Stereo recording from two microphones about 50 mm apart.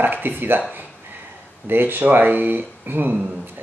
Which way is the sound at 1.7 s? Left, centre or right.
Right.